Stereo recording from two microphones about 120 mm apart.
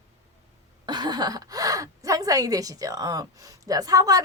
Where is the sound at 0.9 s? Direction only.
35° right (ahead or behind).